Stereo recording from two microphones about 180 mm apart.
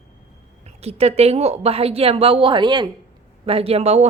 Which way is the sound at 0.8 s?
35° right (ahead or behind).